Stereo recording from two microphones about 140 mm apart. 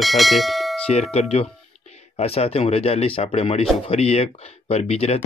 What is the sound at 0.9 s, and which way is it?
Speech, 50° left (ahead or behind).